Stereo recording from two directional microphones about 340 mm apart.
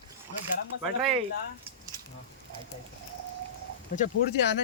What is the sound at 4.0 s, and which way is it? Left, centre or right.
Speech, left.